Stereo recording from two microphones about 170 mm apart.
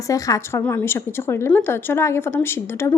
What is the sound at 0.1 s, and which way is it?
Speech, 20° left (ahead or behind).